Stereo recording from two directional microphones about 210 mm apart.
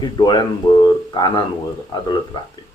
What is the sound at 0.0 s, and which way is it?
Speech, 20° left (ahead or behind).